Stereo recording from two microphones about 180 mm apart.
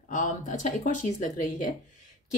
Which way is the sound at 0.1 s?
45° left (ahead or behind).